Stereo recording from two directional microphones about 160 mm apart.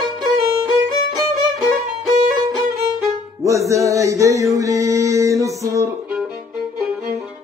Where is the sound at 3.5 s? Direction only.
20° right (ahead or behind).